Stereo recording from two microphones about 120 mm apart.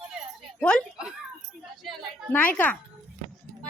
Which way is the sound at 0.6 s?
10° left (ahead or behind).